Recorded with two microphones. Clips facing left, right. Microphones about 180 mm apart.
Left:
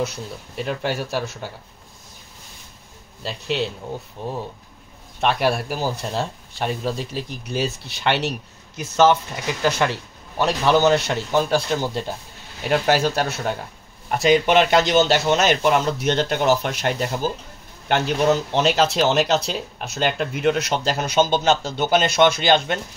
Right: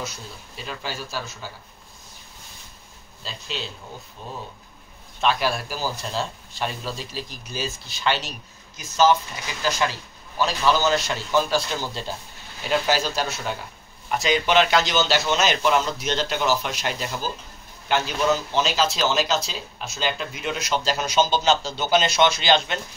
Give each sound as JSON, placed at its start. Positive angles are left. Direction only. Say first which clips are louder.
{"t": 0.0, "sound": "speech", "louder": "left 8 dB", "side_deg": 60}
{"t": 3.2, "sound": "speech", "louder": "left 9 dB", "side_deg": 65}